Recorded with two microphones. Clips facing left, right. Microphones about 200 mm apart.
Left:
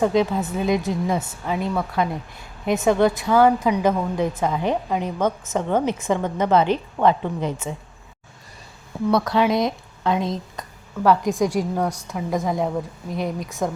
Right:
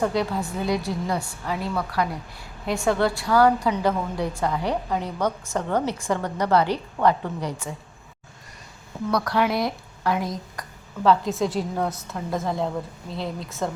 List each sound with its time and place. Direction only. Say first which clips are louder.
0.0 s a woman's voice: left 4 dB; 20° left (ahead or behind)
9.1 s a woman's voice: left 3 dB; 20° left (ahead or behind)